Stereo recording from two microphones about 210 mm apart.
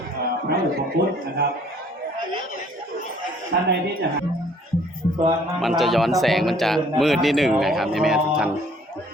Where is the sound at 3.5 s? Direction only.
55° right (ahead or behind).